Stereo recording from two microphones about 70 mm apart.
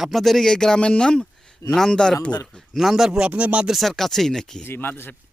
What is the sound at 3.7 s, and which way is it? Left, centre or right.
Speech, centre.